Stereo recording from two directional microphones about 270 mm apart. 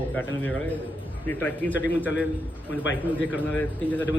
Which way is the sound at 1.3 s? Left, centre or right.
Centre.